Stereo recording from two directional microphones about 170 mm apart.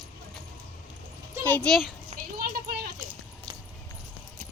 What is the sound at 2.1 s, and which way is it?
Clip-clop, 35° right (ahead or behind).